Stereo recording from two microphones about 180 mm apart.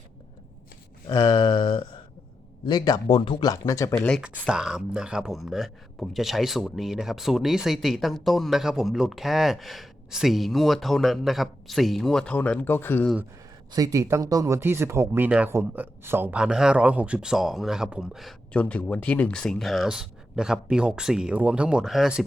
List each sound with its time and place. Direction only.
1.0 s a sound: 20° left (ahead or behind)
2.6 s speech: 20° left (ahead or behind)
3.9 s speech: 5° left (ahead or behind)
13.7 s speech: 20° right (ahead or behind); by 22.2 s centre (ahead or behind)